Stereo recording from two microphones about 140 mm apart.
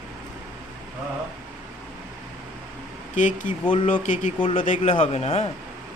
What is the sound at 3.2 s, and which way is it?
Speech, 65° left (ahead or behind).